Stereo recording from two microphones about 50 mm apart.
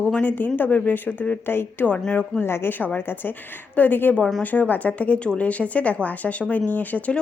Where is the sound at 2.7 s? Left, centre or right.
Left.